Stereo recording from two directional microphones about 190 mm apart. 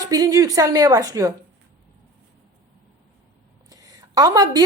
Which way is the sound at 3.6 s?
20° right (ahead or behind).